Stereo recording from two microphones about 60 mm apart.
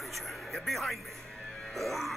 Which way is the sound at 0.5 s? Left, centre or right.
Centre.